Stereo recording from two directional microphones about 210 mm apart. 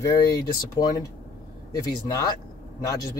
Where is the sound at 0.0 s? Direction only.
15° left (ahead or behind).